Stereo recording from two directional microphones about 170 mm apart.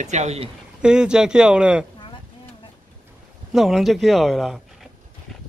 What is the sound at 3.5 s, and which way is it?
Speech, centre (ahead or behind).